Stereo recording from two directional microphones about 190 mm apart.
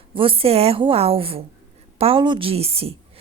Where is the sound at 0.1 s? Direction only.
30° right (ahead or behind).